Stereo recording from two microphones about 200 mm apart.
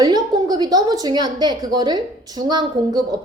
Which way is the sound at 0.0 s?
20° right (ahead or behind).